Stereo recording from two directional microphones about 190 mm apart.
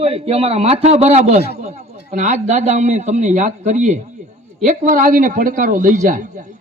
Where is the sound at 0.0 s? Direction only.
30° right (ahead or behind).